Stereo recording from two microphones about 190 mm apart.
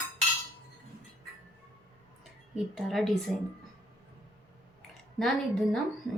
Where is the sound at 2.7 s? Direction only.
Centre (ahead or behind).